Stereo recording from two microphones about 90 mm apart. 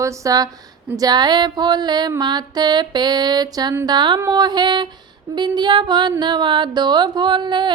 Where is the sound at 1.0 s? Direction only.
50° right (ahead or behind).